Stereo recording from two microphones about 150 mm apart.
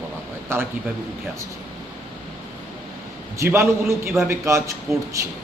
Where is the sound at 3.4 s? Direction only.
15° right (ahead or behind).